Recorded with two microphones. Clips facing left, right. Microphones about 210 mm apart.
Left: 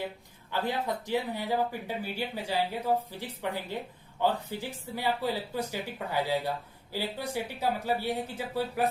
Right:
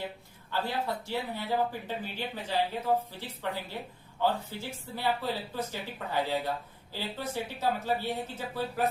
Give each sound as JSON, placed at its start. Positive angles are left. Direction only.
{"t": 0.5, "sound": "speech", "side_deg": 20}